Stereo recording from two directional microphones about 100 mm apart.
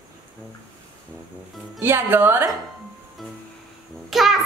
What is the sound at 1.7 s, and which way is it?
Speech, 25° right (ahead or behind).